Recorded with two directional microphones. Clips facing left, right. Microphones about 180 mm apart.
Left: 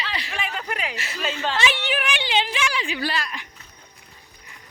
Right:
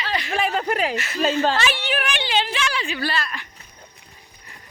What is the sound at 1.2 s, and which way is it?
Speech, 40° right (ahead or behind).